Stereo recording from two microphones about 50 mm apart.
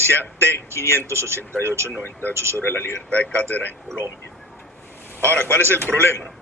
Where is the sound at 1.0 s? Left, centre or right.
Right.